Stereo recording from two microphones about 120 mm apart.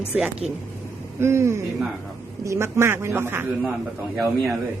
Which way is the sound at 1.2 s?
20° right (ahead or behind).